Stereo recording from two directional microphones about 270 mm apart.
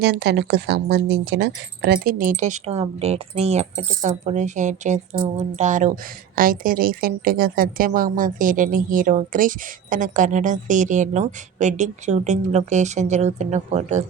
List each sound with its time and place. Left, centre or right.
0.0 s a woman's voice: right